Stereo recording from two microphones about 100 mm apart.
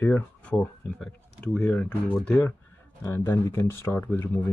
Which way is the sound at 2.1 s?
10° left (ahead or behind).